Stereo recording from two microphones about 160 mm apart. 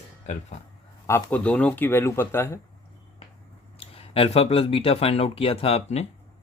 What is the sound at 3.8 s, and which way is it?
Speech, 35° left (ahead or behind).